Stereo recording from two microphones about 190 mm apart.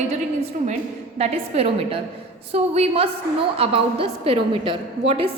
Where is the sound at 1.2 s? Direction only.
30° right (ahead or behind).